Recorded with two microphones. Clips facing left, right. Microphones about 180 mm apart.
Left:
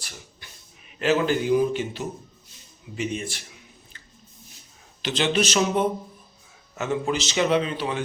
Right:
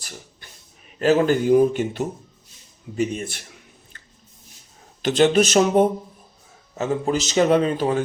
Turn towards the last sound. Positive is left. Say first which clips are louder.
# right 5 dB
turn(degrees=-45)  # may be behind; listen again after turning